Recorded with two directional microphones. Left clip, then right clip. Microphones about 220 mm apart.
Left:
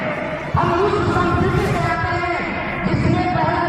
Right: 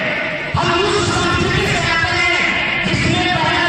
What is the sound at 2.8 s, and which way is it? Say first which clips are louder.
Music: right 4 dB; centre (ahead or behind).